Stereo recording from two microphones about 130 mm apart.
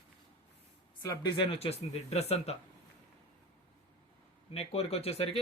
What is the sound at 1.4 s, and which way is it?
Speech, 45° left (ahead or behind).